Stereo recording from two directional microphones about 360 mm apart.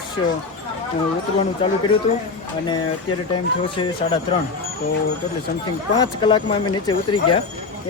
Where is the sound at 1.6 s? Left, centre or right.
Centre.